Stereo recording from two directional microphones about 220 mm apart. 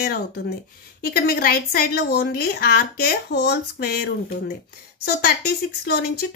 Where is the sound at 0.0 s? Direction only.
45° left (ahead or behind).